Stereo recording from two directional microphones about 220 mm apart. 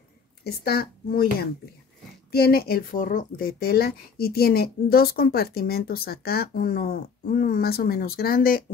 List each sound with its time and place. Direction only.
0.4 s speech: 45° left (ahead or behind)